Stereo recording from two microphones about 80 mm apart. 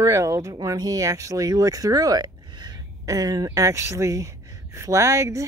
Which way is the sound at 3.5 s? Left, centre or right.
Right.